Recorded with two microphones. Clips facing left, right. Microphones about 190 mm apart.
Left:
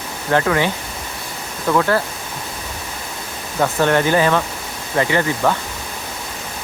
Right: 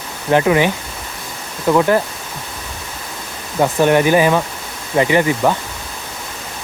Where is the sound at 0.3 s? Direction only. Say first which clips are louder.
Right 4 dB; 15° right (ahead or behind).